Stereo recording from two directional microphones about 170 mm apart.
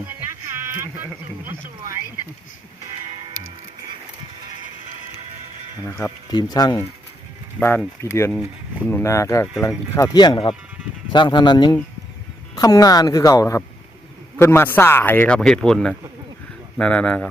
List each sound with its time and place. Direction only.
0.5 s a sound: 15° right (ahead or behind)
1.5 s speech: 15° right (ahead or behind)
5.8 s a woman's voice: 20° left (ahead or behind)
8.0 s speech: 15° left (ahead or behind)
8.3 s speech: 5° right (ahead or behind)
8.9 s a woman's voice: 15° left (ahead or behind)